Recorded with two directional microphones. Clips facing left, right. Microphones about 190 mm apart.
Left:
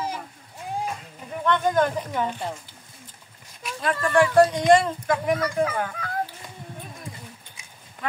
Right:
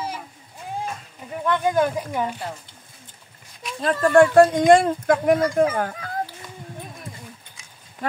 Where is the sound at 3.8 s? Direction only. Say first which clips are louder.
Right 5 dB; 40° right (ahead or behind).